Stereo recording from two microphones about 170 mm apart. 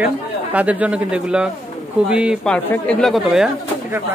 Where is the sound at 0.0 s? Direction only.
10° right (ahead or behind).